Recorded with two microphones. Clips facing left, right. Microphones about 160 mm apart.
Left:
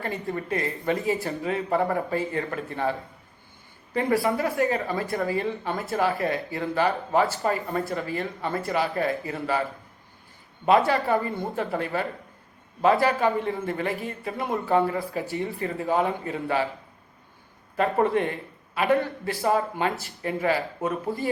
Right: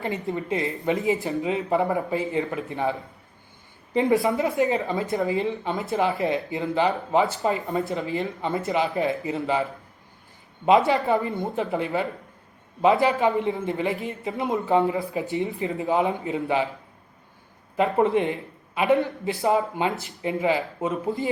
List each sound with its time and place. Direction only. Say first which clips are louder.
0.0 s a woman's voice: right 2 dB; 20° right (ahead or behind)
3.9 s a woman's voice: right 3 dB; 20° right (ahead or behind)
10.7 s a woman's voice: right 2 dB; 20° right (ahead or behind)
17.9 s a woman's voice: right 2 dB; 20° right (ahead or behind)